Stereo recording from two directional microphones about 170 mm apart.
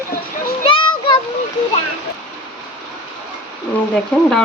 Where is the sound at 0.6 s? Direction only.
30° left (ahead or behind).